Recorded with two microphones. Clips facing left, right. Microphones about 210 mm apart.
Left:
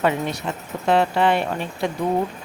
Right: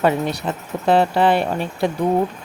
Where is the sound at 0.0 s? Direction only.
35° right (ahead or behind).